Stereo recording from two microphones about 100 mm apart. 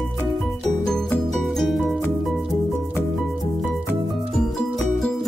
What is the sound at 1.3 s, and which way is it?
Music, centre (ahead or behind).